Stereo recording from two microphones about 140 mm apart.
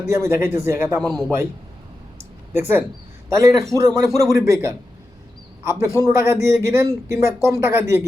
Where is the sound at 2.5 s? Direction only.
15° right (ahead or behind).